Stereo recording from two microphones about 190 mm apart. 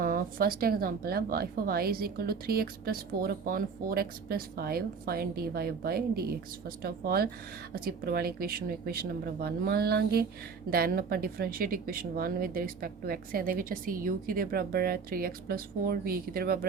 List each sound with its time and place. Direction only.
0.0 s speech: 50° right (ahead or behind)